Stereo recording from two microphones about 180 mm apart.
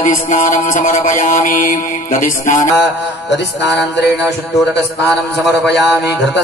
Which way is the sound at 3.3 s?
75° left (ahead or behind).